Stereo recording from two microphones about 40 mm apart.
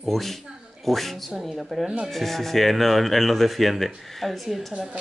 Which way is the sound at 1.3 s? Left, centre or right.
Centre.